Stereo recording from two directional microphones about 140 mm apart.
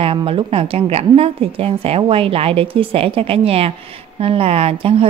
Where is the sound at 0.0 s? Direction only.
40° right (ahead or behind).